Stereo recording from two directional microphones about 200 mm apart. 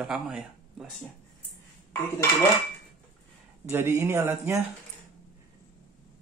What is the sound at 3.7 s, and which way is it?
Speech, 10° right (ahead or behind).